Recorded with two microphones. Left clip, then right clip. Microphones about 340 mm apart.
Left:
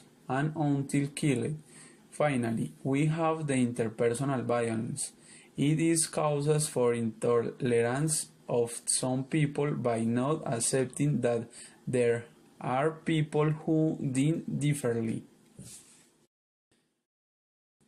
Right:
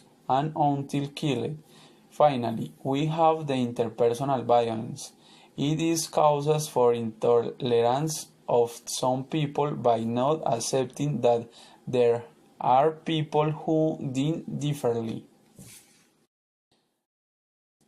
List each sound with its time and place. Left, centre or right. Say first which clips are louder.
0.3 s speech: right 7 dB; right